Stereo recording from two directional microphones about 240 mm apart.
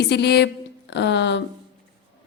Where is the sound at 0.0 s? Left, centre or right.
Left.